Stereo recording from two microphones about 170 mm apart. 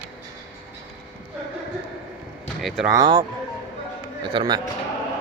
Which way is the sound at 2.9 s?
25° right (ahead or behind).